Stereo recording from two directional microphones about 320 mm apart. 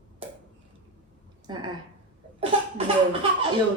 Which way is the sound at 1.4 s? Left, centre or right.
Centre.